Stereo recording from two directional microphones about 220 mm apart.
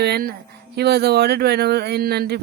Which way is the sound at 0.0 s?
45° right (ahead or behind).